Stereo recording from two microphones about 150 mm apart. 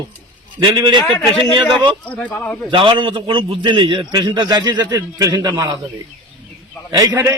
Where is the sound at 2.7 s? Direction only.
35° right (ahead or behind).